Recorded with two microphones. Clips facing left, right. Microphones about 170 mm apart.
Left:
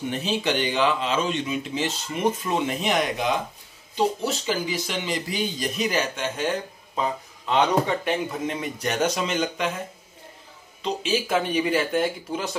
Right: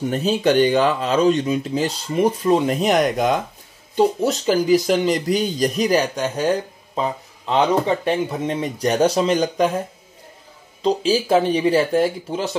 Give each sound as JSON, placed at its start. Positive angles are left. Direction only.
{"t": 0.1, "sound": "speech", "side_deg": -40}
{"t": 10.8, "sound": "speech", "side_deg": -35}